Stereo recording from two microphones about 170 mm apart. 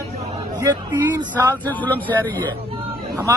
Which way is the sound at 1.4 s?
15° right (ahead or behind).